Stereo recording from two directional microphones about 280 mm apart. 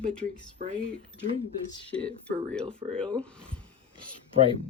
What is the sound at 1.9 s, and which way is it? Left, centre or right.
Speech, centre.